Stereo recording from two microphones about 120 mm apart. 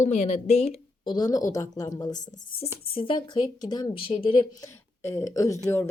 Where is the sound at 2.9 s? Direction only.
45° left (ahead or behind).